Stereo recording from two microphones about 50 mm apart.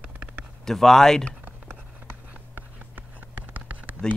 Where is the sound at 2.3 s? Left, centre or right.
Right.